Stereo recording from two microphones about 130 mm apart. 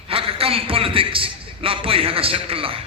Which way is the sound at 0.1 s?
45° right (ahead or behind).